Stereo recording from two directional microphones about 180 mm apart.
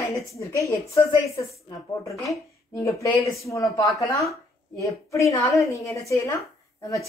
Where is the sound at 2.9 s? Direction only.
15° left (ahead or behind).